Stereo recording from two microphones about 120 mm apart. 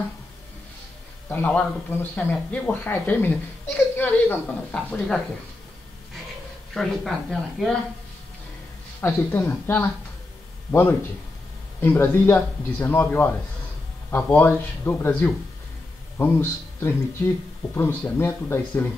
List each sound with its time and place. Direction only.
1.3 s speech: 15° left (ahead or behind)
6.7 s speech: 5° left (ahead or behind)
9.0 s a man's voice: 15° left (ahead or behind)